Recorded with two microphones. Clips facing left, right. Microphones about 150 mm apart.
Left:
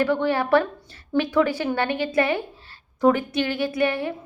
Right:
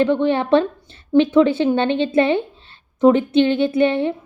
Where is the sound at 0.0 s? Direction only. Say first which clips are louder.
Right 5 dB; 20° right (ahead or behind).